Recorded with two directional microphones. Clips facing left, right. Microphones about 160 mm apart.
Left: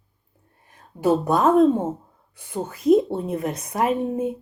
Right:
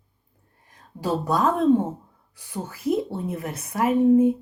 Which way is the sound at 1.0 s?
20° left (ahead or behind).